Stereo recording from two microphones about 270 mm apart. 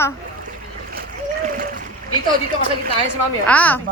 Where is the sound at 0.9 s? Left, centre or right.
Right.